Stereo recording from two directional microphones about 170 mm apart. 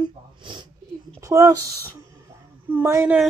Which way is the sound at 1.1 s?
15° right (ahead or behind).